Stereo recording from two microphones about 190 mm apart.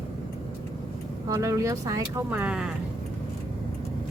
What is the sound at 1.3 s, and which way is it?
Speech, 15° right (ahead or behind).